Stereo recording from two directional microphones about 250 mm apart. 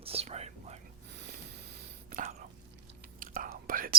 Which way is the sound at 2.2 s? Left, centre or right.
Right.